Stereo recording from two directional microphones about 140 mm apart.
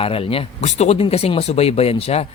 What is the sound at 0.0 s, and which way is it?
Speech, 40° left (ahead or behind).